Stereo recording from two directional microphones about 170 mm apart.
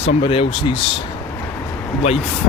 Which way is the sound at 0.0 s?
35° left (ahead or behind).